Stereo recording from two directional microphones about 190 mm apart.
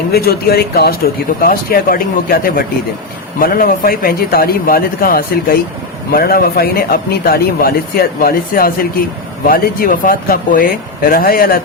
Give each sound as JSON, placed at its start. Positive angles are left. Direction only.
{"t": 0.1, "sound": "a man's voice", "side_deg": 55}